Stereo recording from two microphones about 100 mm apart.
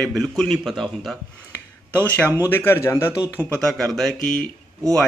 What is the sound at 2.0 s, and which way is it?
A man's voice, 15° left (ahead or behind).